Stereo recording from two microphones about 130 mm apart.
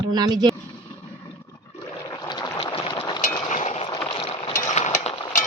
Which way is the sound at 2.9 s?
35° left (ahead or behind).